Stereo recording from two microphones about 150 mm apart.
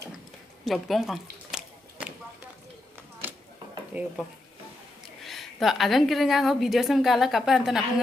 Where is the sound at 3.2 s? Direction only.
15° right (ahead or behind).